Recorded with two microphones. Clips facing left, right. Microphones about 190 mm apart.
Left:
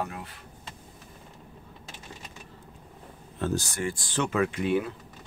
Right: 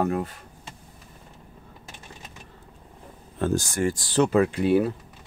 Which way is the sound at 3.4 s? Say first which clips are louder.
Right 5 dB; 50° right (ahead or behind).